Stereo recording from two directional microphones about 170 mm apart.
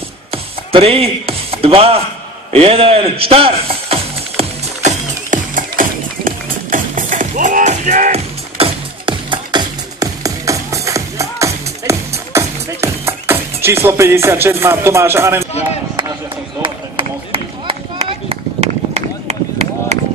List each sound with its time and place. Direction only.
0.3 s music: 35° right (ahead or behind); by 15.4 s 15° right (ahead or behind)
16.6 s run: 30° right (ahead or behind)